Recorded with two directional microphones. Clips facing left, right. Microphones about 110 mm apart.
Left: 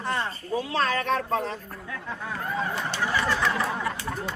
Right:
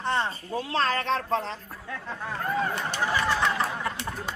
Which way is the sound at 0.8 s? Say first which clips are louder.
Even; 30° right (ahead or behind).